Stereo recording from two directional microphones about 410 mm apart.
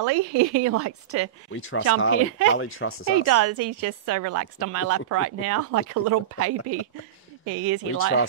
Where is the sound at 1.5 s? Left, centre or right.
Left.